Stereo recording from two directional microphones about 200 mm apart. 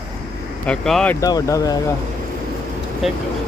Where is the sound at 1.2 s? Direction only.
15° left (ahead or behind).